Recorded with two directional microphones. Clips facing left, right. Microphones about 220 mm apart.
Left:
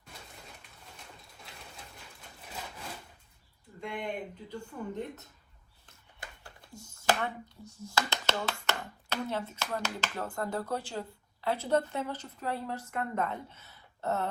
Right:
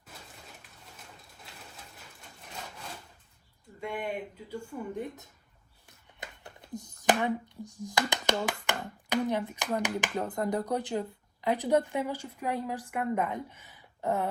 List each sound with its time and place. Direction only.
3.8 s speech: 5° right (ahead or behind)
6.1 s a sound: 20° right (ahead or behind)
7.8 s speech: 15° right (ahead or behind)